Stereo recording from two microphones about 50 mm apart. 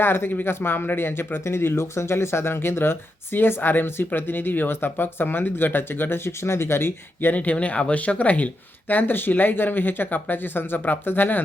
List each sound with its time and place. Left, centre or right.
0.0 s speech: left
7.3 s speech: left